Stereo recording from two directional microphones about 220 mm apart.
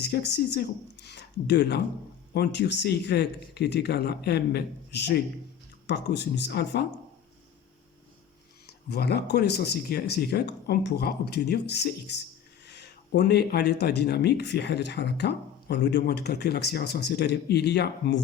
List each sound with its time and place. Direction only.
0.0 s speech: 50° left (ahead or behind)
8.6 s speech: 45° left (ahead or behind)